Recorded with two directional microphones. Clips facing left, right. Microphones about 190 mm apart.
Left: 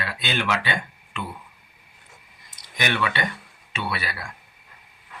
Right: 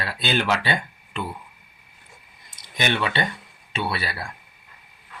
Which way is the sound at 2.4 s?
25° right (ahead or behind).